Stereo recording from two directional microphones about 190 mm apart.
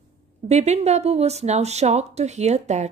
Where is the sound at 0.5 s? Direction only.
35° right (ahead or behind).